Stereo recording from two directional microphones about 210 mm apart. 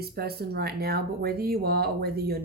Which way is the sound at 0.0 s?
45° right (ahead or behind).